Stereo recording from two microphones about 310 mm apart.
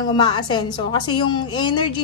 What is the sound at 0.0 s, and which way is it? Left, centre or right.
A woman's voice, centre.